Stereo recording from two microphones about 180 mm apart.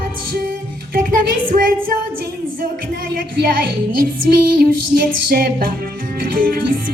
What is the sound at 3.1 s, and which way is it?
Music, 55° right (ahead or behind).